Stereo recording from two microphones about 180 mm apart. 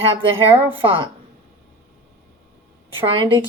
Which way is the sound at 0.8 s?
30° right (ahead or behind).